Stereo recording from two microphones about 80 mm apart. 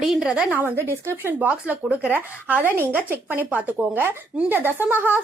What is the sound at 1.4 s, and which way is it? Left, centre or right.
Speech, right.